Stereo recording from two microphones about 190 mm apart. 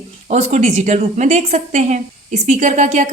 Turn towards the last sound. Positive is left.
turn(degrees=-40)  # may be behind; listen again after turning